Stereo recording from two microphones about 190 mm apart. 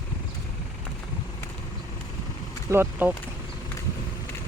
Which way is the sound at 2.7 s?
10° right (ahead or behind).